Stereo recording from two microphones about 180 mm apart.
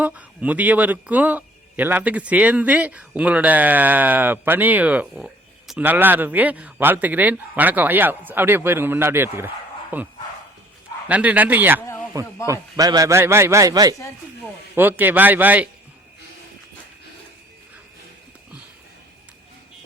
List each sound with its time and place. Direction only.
0.0 s a man's voice: 10° right (ahead or behind)
11.1 s a man's voice: 10° right (ahead or behind)